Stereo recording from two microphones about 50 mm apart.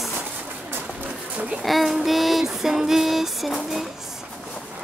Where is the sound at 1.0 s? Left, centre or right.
Right.